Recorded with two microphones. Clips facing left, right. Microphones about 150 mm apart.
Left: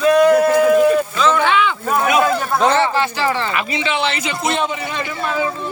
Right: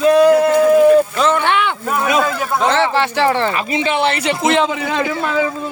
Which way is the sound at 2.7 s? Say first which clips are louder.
Right 1 dB; 80° right.